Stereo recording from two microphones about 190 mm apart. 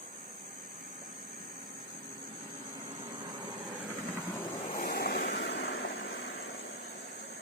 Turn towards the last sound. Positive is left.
turn(degrees=75)  # may be behind; listen again after turning